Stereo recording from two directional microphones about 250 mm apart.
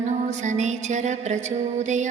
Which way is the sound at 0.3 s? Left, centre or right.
Right.